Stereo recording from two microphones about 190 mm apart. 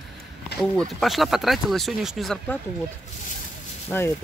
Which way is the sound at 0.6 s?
Centre (ahead or behind).